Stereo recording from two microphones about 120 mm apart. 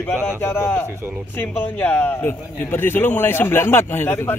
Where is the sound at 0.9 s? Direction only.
20° right (ahead or behind).